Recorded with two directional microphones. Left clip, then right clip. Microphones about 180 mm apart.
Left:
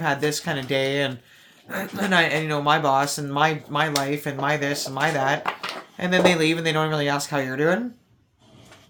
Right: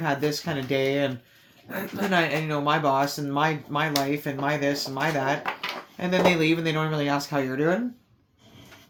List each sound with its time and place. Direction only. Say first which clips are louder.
0.0 s speech: left 3 dB; 25° left (ahead or behind)